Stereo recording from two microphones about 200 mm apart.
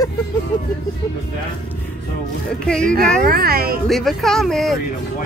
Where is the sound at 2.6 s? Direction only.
5° left (ahead or behind).